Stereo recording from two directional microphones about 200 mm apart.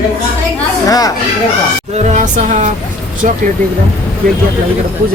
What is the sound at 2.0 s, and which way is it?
Speech, 35° right (ahead or behind).